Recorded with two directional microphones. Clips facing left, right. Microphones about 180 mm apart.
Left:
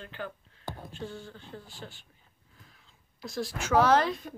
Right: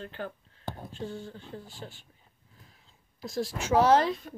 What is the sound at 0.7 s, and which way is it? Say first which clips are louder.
Speech: right 2 dB; 25° right (ahead or behind).